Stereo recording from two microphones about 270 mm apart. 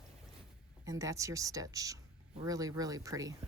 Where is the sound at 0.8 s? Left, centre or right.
Centre.